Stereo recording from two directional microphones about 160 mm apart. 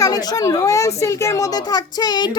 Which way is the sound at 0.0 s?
25° left (ahead or behind).